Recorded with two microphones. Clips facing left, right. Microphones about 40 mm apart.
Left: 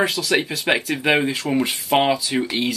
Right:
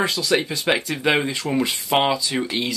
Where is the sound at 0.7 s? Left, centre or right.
Left.